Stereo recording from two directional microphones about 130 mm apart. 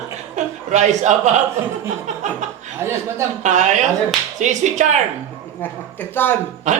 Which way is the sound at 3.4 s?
65° right (ahead or behind).